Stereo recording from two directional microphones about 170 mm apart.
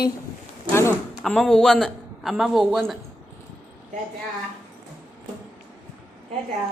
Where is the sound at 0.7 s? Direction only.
15° left (ahead or behind).